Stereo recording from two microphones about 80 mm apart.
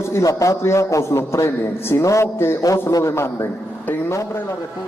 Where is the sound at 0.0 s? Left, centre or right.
Left.